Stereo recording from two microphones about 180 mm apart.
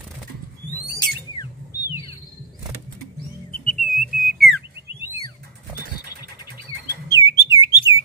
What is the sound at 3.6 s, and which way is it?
Whistle, centre (ahead or behind).